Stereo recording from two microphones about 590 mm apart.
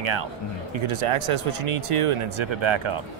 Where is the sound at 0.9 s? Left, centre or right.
Right.